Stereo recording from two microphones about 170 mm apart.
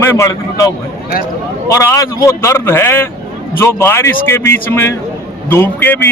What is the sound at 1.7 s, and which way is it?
A man's voice, 15° left (ahead or behind).